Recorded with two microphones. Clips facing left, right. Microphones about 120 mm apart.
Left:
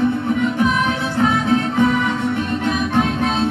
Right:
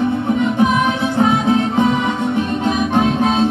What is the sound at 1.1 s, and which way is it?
Music, 20° right (ahead or behind).